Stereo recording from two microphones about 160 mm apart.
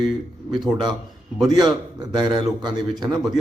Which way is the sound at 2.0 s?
25° right (ahead or behind).